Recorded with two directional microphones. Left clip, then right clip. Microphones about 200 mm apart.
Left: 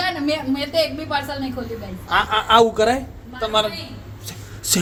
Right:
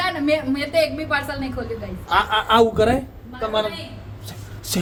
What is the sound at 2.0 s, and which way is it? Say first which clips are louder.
Speech: even; 15° right (ahead or behind).